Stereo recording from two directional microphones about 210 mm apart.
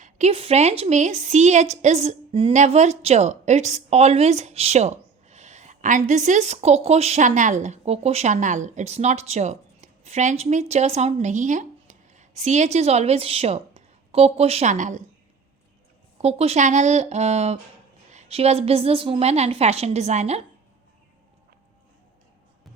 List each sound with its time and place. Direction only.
0.0 s a woman's voice: 30° right (ahead or behind)
16.2 s a woman's voice: 30° right (ahead or behind)